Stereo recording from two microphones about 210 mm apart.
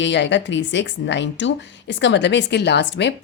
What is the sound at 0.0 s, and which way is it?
Speech, 60° left (ahead or behind).